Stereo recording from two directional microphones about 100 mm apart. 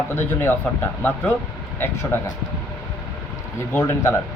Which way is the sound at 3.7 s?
20° left (ahead or behind).